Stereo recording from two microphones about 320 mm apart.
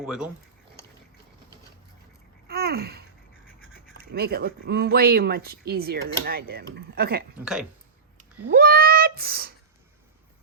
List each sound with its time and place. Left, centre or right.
0.0 s speech: centre
2.5 s babbling: right
4.1 s speech: right
7.3 s speech: centre
8.2 s speech: right